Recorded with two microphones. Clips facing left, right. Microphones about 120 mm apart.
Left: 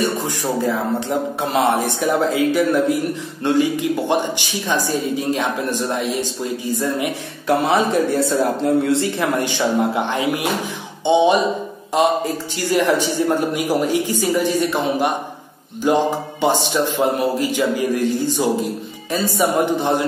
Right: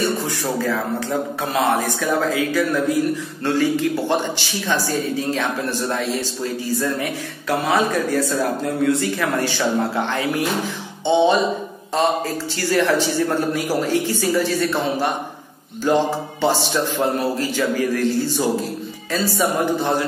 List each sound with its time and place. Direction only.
0.2 s a woman's voice: 20° left (ahead or behind)